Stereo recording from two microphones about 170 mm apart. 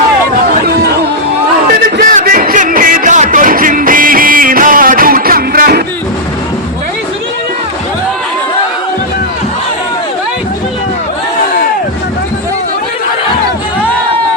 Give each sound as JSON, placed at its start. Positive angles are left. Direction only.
{"t": 2.0, "sound": "music", "side_deg": -55}